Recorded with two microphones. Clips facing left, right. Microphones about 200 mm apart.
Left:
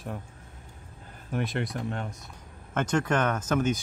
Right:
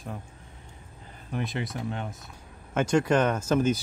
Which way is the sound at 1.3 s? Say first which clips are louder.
Left 2 dB; centre (ahead or behind).